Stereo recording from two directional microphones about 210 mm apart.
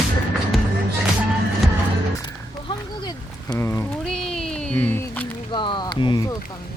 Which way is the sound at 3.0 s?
15° left (ahead or behind).